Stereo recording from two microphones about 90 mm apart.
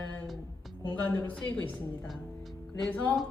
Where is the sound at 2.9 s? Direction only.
20° left (ahead or behind).